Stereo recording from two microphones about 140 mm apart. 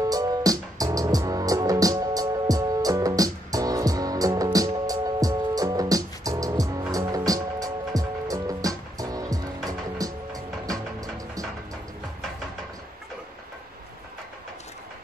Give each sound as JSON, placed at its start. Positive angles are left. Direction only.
{"t": 0.0, "sound": "music", "side_deg": -25}